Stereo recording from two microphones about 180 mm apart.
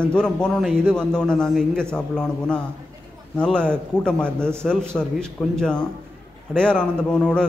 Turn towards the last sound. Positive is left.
turn(degrees=5)  # may be behind; listen again after turning